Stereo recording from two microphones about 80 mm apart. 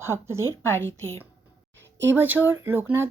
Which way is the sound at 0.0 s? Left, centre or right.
Right.